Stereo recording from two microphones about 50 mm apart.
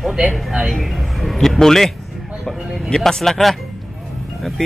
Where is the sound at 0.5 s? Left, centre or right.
Centre.